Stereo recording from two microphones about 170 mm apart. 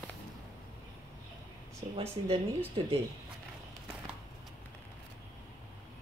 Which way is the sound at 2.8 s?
30° right (ahead or behind).